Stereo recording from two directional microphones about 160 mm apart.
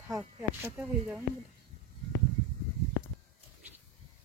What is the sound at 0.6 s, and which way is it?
Speech, 5° right (ahead or behind).